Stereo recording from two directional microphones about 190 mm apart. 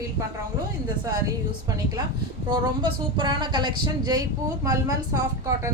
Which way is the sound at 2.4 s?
25° right (ahead or behind).